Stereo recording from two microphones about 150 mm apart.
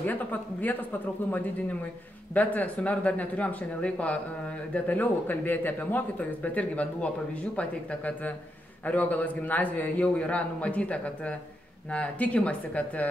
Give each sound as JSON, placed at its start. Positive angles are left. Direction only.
{"t": 0.0, "sound": "a man's voice", "side_deg": 10}